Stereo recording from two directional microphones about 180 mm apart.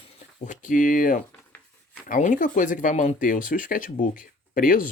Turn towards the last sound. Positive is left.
turn(degrees=50)  # may be behind; listen again after turning